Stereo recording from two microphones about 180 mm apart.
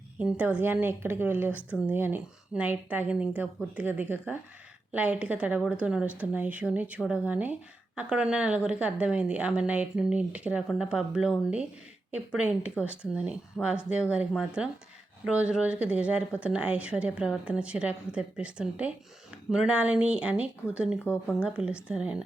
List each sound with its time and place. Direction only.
0.2 s a woman's voice: 5° right (ahead or behind)
21.0 s speech: 10° left (ahead or behind)
21.3 s a woman's voice: 5° right (ahead or behind)